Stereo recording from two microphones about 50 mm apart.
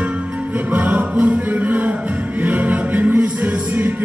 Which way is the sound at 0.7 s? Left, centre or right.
Right.